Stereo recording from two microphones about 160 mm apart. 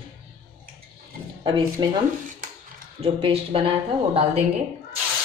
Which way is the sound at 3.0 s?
35° right (ahead or behind).